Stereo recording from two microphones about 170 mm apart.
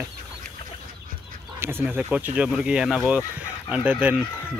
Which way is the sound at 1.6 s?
15° right (ahead or behind).